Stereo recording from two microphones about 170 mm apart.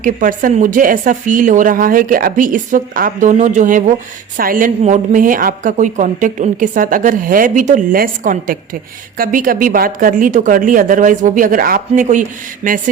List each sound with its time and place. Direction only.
0.0 s speech: 50° right (ahead or behind)